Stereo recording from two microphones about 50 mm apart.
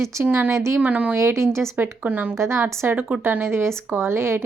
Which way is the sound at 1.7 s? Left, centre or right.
Right.